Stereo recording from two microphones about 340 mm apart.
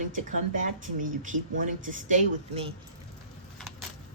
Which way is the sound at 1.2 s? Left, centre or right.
Right.